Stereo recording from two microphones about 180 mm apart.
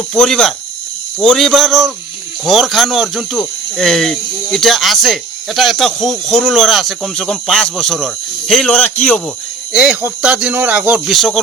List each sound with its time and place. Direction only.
0.1 s speech: 5° left (ahead or behind)
9.7 s speech: 5° right (ahead or behind)